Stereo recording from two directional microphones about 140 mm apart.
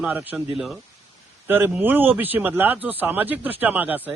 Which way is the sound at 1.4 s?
15° right (ahead or behind).